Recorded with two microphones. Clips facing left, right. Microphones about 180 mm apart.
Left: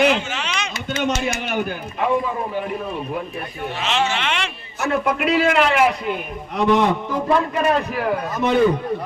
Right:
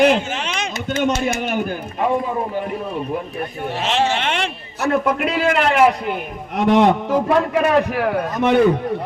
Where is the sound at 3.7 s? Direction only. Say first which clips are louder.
Right 3 dB; 40° right (ahead or behind).